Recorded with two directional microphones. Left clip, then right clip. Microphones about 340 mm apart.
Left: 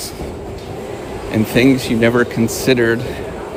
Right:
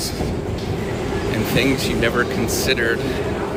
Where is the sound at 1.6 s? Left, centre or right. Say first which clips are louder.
Left 6 dB; centre.